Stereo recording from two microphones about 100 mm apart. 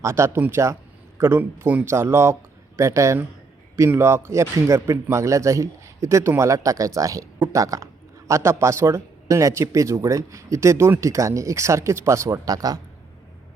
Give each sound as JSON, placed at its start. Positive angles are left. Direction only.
{"t": 0.0, "sound": "a man's voice", "side_deg": -30}